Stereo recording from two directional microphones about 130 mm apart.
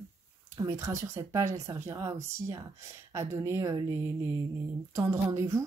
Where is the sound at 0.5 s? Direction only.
25° right (ahead or behind).